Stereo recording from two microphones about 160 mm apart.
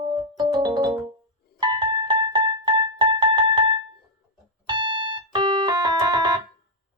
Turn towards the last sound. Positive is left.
turn(degrees=-25)  # may be behind; listen again after turning